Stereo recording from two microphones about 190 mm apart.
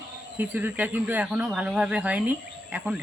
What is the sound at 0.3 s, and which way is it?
Speech, 10° right (ahead or behind).